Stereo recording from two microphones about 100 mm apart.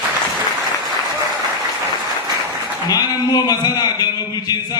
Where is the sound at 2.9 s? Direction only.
40° left (ahead or behind).